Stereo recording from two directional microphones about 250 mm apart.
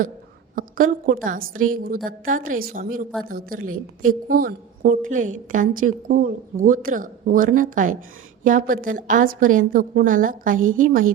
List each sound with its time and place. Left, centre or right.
0.5 s a woman's voice: right